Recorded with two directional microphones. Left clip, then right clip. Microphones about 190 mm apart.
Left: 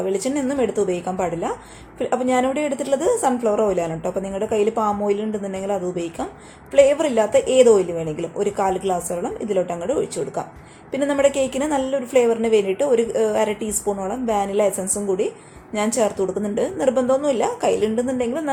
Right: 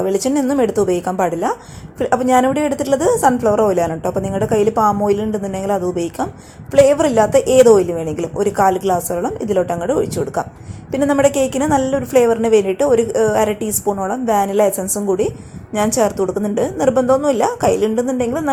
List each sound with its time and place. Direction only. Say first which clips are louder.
0.0 s a woman's voice: right 5 dB; 25° right (ahead or behind)